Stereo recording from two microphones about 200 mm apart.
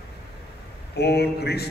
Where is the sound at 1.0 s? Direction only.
55° left (ahead or behind).